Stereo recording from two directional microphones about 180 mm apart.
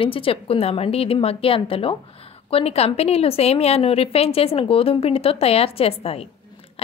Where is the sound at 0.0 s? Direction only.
30° left (ahead or behind).